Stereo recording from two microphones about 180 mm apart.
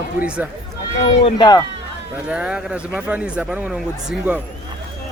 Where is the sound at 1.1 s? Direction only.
30° left (ahead or behind).